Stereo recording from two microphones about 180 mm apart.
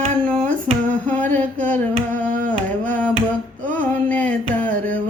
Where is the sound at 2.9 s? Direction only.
10° left (ahead or behind).